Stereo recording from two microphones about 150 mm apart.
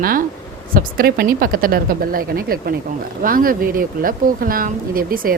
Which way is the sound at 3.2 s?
70° right (ahead or behind).